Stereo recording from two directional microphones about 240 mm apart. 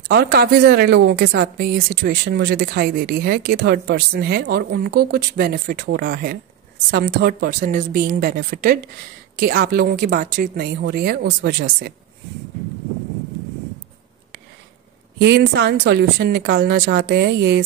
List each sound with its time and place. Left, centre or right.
0.1 s speech: right
15.1 s speech: right